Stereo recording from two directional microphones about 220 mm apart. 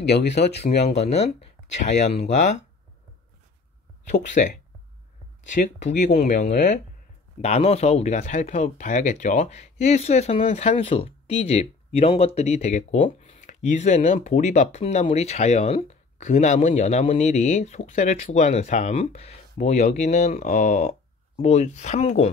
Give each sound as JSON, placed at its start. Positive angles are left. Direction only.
{"t": 0.0, "sound": "speech", "side_deg": 50}
{"t": 0.8, "sound": "speech", "side_deg": 30}
{"t": 4.1, "sound": "speech", "side_deg": 35}